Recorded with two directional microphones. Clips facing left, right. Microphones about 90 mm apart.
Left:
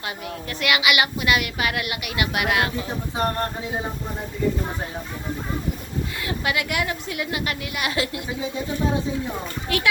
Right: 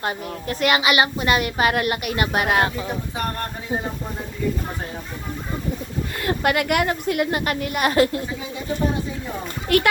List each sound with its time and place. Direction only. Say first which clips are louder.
0.0 s a woman's voice: right 4 dB; 40° right (ahead or behind)
6.1 s a woman's voice: right 6 dB; 50° right (ahead or behind)
9.7 s a woman's voice: right 7 dB; 55° right (ahead or behind)